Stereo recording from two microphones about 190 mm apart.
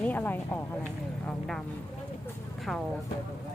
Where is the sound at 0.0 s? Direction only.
10° left (ahead or behind).